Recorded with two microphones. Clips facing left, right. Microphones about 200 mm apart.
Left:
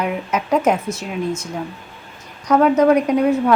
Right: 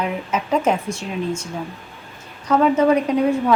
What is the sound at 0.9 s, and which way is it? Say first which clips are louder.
Speech: left 1 dB; 10° right (ahead or behind).